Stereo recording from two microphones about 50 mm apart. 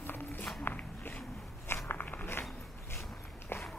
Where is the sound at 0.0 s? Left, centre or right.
Left.